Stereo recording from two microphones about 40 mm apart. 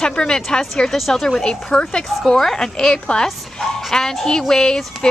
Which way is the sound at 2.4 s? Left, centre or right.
Centre.